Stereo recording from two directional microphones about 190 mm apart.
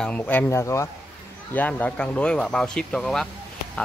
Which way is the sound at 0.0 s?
5° left (ahead or behind).